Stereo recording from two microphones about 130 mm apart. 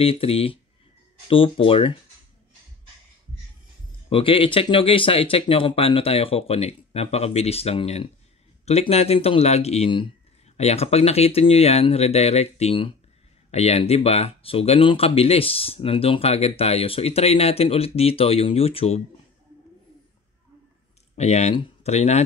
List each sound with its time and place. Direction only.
0.0 s speech: 45° left (ahead or behind)
4.1 s speech: 45° left (ahead or behind)
21.2 s speech: 60° left (ahead or behind)